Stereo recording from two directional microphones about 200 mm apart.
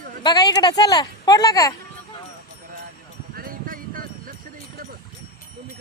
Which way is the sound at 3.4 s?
45° right (ahead or behind).